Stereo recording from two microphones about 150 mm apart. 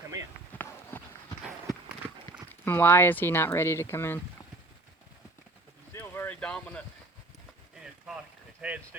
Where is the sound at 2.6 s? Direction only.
15° left (ahead or behind).